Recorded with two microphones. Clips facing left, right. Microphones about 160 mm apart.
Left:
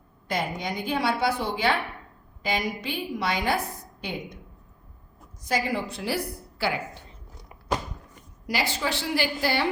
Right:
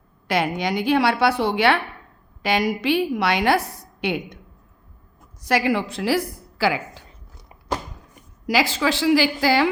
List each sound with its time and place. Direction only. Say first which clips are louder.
0.3 s a woman's voice: right 7 dB; 80° right
5.4 s a woman's voice: right 6 dB; 75° right (ahead or behind); by 7.0 s 90° right
8.4 s a woman's voice: right 7 dB; 90° right